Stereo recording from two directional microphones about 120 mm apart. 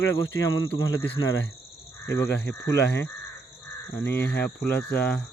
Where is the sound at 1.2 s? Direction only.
35° left (ahead or behind).